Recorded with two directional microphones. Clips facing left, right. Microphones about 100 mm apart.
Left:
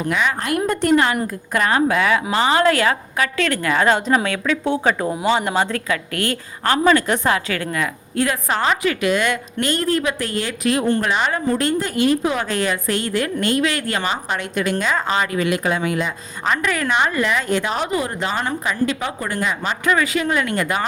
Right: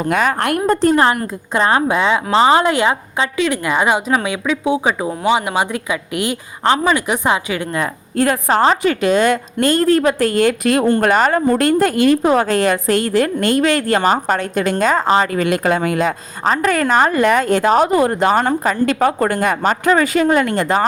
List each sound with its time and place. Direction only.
0.1 s a woman's voice: 45° right (ahead or behind)
0.3 s a woman's voice: 60° right (ahead or behind)
0.7 s a woman's voice: 35° right (ahead or behind); by 7.8 s 15° right (ahead or behind)
7.8 s a woman's voice: 40° right (ahead or behind)